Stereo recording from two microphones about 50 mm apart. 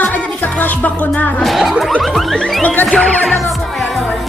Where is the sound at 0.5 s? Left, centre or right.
Left.